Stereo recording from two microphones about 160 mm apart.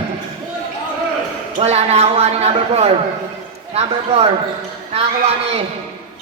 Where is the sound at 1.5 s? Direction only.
40° right (ahead or behind).